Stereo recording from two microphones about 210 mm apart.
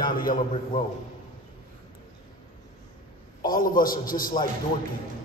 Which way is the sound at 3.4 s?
40° left (ahead or behind).